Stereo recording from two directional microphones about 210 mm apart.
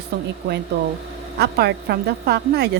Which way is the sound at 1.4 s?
50° right (ahead or behind).